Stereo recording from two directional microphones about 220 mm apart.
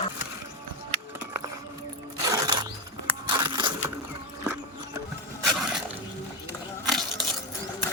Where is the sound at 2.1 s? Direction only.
15° right (ahead or behind).